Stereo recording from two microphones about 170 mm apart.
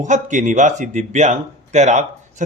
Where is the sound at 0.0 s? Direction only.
45° right (ahead or behind).